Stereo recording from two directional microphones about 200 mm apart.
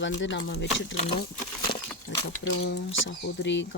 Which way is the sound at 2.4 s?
65° left (ahead or behind).